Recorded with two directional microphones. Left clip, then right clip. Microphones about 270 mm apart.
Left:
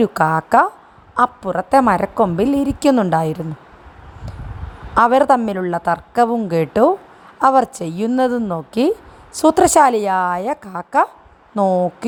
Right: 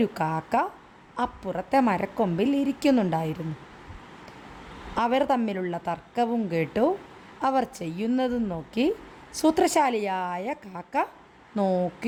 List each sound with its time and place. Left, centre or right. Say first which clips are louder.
0.0 s a woman's voice: left 11 dB; left
4.9 s a woman's voice: left 11 dB; left